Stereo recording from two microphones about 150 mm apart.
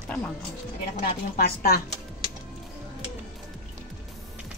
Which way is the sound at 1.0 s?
85° left.